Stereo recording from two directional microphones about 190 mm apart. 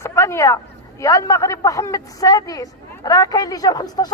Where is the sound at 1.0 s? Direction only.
15° left (ahead or behind).